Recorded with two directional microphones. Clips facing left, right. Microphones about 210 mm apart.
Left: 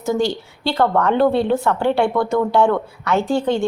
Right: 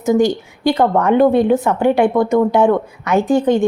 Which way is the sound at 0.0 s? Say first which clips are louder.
Right 6 dB; 15° right (ahead or behind).